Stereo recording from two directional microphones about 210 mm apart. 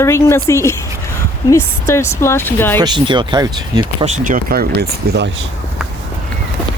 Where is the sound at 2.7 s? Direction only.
20° right (ahead or behind); by 5.3 s 50° right (ahead or behind).